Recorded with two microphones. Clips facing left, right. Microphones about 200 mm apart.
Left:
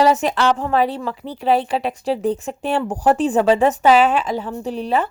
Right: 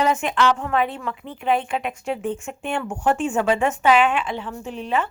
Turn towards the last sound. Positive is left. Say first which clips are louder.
# left 4 dB
turn(degrees=35)  # may be behind; listen again after turning